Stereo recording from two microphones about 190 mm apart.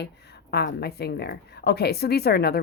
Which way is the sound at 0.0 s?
60° left (ahead or behind).